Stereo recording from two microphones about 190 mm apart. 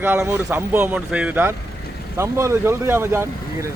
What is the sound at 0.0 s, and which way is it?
Speech, 15° right (ahead or behind).